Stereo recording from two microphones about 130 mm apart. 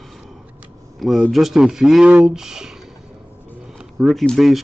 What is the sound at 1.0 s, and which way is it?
A man's voice, centre (ahead or behind).